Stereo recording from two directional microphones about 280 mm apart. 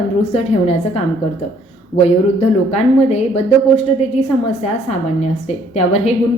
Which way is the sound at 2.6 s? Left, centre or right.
Left.